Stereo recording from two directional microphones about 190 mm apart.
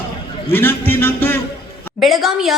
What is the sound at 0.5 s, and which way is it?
Speech, 10° left (ahead or behind).